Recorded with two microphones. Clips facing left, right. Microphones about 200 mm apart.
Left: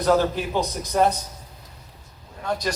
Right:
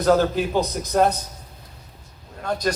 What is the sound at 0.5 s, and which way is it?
Speech, 55° right (ahead or behind).